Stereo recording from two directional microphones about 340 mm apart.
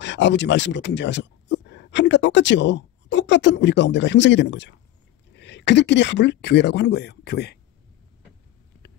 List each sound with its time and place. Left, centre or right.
0.0 s speech: left